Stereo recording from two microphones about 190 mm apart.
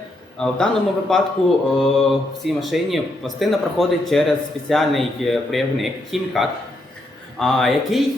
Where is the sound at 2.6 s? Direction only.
Centre (ahead or behind).